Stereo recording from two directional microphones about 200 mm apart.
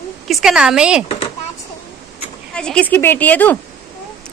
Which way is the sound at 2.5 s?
5° left (ahead or behind).